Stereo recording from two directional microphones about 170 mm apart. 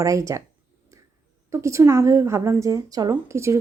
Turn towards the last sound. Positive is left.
turn(degrees=-15)  # may be behind; listen again after turning